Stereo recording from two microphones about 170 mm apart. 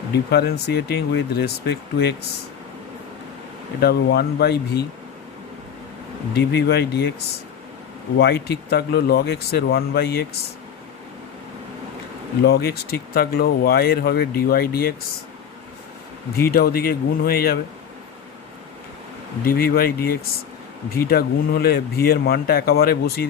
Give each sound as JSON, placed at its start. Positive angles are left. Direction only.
{"t": 0.3, "sound": "speech", "side_deg": 75}
{"t": 3.8, "sound": "speech", "side_deg": 65}
{"t": 6.3, "sound": "speech", "side_deg": 70}
{"t": 8.2, "sound": "speech", "side_deg": 70}
{"t": 12.5, "sound": "speech", "side_deg": 70}
{"t": 16.3, "sound": "speech", "side_deg": 65}
{"t": 19.5, "sound": "speech", "side_deg": 60}